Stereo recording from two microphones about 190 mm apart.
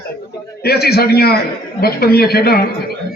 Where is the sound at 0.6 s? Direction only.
55° left (ahead or behind).